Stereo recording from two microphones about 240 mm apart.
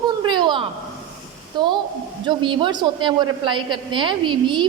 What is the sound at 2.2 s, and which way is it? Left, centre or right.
A woman's voice, right.